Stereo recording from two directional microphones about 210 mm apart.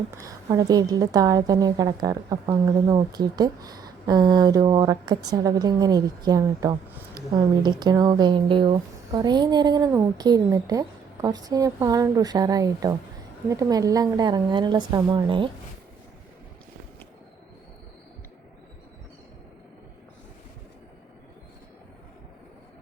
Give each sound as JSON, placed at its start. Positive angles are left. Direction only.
{"t": 0.2, "sound": "a woman's voice", "side_deg": -15}